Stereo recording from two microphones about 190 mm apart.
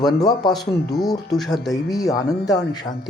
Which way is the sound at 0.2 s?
20° left (ahead or behind).